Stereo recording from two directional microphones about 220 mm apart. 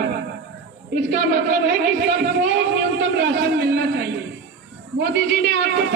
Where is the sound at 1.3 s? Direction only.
55° right (ahead or behind).